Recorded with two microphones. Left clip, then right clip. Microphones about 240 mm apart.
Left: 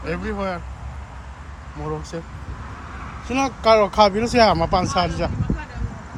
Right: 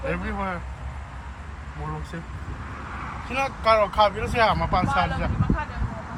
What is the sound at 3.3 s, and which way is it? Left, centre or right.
Speech, centre.